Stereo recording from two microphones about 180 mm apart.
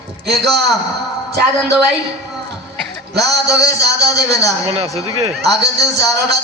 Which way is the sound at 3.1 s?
65° right (ahead or behind).